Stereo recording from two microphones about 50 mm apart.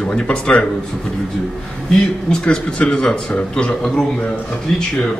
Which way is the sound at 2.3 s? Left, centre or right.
Centre.